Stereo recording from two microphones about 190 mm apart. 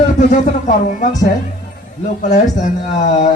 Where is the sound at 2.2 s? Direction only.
40° left (ahead or behind).